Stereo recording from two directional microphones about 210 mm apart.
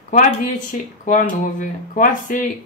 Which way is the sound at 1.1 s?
35° left (ahead or behind).